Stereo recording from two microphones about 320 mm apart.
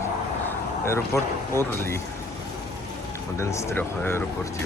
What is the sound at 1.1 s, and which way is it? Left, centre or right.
Speech, centre.